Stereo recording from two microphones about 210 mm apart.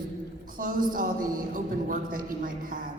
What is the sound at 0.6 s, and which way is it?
A man's voice, 40° right (ahead or behind).